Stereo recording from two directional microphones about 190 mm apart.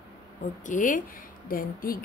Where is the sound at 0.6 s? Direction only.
40° left (ahead or behind).